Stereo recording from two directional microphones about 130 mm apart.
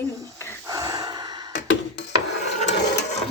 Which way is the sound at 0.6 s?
25° right (ahead or behind).